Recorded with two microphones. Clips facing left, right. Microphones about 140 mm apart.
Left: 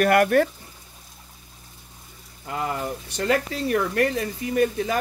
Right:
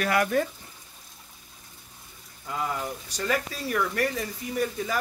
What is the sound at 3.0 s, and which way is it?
Speech, 65° left (ahead or behind).